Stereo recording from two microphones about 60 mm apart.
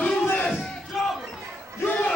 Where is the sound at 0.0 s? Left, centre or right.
Left.